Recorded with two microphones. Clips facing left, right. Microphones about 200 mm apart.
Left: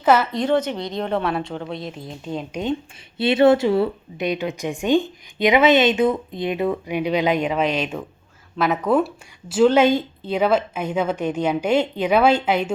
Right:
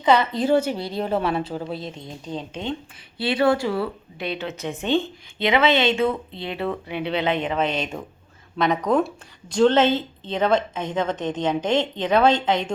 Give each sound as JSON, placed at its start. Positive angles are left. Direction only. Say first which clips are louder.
{"t": 0.0, "sound": "a woman's voice", "louder": "left 1 dB", "side_deg": 5}